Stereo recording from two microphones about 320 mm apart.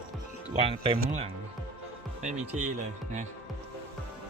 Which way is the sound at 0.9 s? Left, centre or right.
Right.